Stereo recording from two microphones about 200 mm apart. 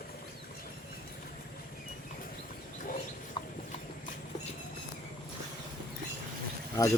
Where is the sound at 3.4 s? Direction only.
25° left (ahead or behind).